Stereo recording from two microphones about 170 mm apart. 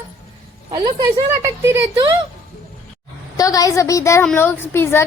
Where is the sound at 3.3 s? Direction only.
20° left (ahead or behind).